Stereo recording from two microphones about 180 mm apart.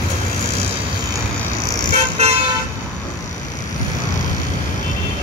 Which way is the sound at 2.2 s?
35° right (ahead or behind).